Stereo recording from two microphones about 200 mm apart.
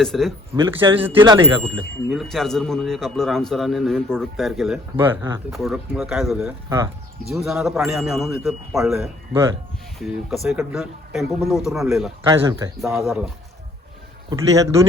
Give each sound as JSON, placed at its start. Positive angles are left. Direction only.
{"t": 0.0, "sound": "a man's voice", "side_deg": 0}
{"t": 0.5, "sound": "speech", "side_deg": -15}
{"t": 1.1, "sound": "a man's voice", "side_deg": -20}
{"t": 2.0, "sound": "a man's voice", "side_deg": 0}
{"t": 4.9, "sound": "speech", "side_deg": -10}
{"t": 5.5, "sound": "a man's voice", "side_deg": 0}
{"t": 6.7, "sound": "speech", "side_deg": -15}
{"t": 7.3, "sound": "a man's voice", "side_deg": 0}
{"t": 9.0, "sound": "speech", "side_deg": -15}
{"t": 10.0, "sound": "a man's voice", "side_deg": 0}
{"t": 12.2, "sound": "a man's voice", "side_deg": -20}
{"t": 12.8, "sound": "a man's voice", "side_deg": 0}
{"t": 14.3, "sound": "speech", "side_deg": -15}